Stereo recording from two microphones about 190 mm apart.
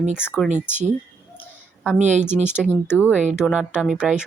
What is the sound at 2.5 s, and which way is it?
Speech, 5° right (ahead or behind).